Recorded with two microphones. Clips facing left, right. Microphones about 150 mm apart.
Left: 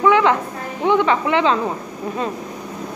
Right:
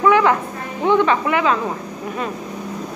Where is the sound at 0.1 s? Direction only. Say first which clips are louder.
Even; 20° left (ahead or behind).